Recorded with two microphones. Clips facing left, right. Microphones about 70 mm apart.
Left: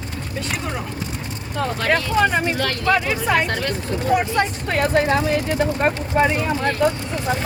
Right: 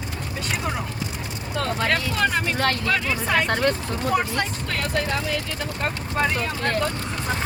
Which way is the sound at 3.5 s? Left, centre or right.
Right.